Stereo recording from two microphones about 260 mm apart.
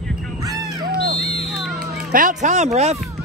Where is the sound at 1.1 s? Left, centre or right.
Left.